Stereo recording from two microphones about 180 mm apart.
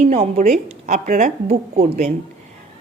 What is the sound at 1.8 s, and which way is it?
Speech, 35° right (ahead or behind).